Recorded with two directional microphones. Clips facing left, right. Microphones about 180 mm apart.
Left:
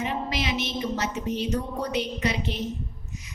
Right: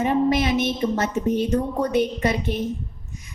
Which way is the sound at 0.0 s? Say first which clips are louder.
Right 9 dB; 50° right (ahead or behind).